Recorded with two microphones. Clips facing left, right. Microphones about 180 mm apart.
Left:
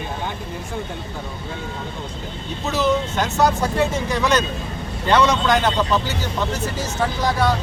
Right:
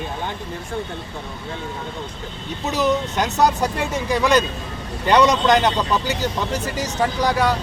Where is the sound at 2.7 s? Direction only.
15° right (ahead or behind).